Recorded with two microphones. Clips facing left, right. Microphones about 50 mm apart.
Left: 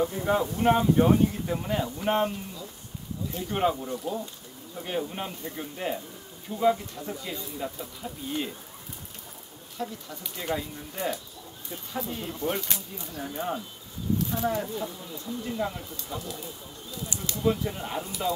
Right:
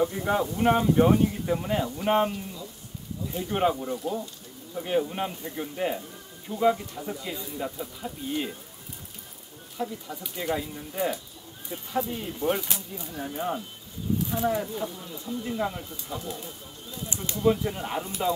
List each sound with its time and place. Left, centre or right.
0.0 s speech: centre
9.8 s speech: centre
12.1 s speech: centre
14.1 s a sound: centre
14.6 s speech: centre